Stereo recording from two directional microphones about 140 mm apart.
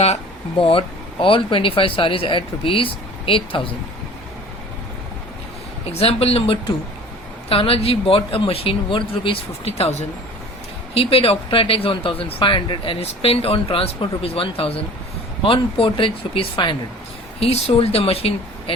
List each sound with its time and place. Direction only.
0.6 s speech: 40° left (ahead or behind)
5.9 s speech: 45° left (ahead or behind)
10.9 s speech: 45° left (ahead or behind)